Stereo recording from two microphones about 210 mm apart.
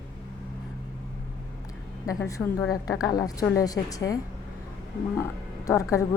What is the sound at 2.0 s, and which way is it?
A woman's voice, 15° left (ahead or behind).